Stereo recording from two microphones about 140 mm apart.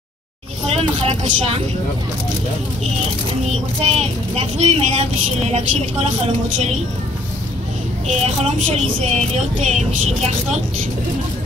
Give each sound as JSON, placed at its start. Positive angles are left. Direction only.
{"t": 0.7, "sound": "speech", "side_deg": -45}
{"t": 3.8, "sound": "a woman's voice", "side_deg": -50}
{"t": 8.1, "sound": "a woman's voice", "side_deg": -55}